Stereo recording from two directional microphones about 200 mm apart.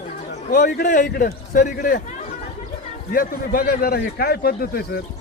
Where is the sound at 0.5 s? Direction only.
45° left (ahead or behind).